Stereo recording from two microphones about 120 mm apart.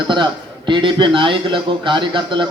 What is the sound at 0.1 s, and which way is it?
A man's voice, 40° right (ahead or behind).